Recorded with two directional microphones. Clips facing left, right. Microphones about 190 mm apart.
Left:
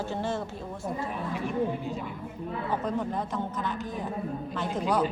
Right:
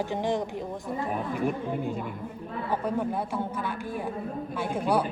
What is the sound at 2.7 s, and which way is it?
Speech, 10° right (ahead or behind).